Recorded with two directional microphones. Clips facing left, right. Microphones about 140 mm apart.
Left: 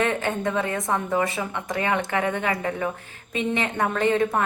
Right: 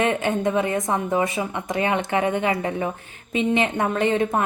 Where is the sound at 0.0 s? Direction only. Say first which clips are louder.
Right 3 dB; 20° right (ahead or behind).